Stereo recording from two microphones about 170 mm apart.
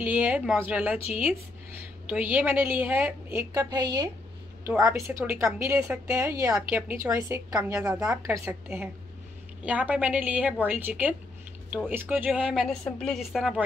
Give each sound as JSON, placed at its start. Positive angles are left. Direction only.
{"t": 0.0, "sound": "a woman's voice", "side_deg": -10}
{"t": 2.0, "sound": "a woman's voice", "side_deg": -10}